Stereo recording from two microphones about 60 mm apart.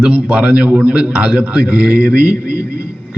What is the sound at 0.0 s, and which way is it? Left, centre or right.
A man's voice, right.